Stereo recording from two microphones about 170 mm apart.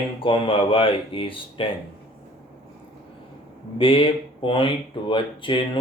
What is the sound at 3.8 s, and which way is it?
Speech, 30° left (ahead or behind).